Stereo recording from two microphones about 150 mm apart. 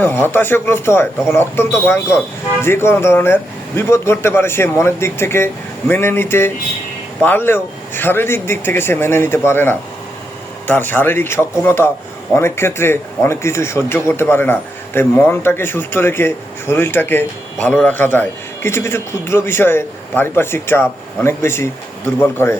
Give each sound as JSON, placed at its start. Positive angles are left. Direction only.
{"t": 0.0, "sound": "speech", "side_deg": 15}